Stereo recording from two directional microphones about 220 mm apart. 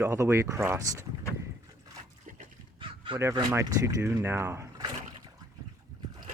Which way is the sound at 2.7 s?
25° right (ahead or behind).